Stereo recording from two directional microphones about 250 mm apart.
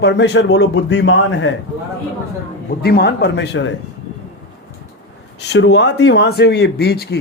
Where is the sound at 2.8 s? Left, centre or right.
Left.